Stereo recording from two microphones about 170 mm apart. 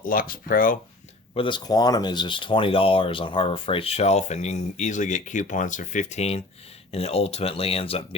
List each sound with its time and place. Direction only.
0.0 s speech: 55° left (ahead or behind)
1.4 s speech: 25° left (ahead or behind)